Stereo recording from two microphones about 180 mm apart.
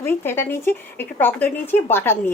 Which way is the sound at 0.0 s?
10° left (ahead or behind).